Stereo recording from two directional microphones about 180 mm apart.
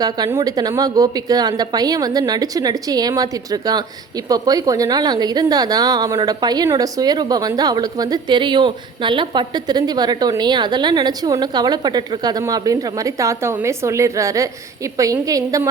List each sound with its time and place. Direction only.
0.0 s a woman's voice: 20° right (ahead or behind)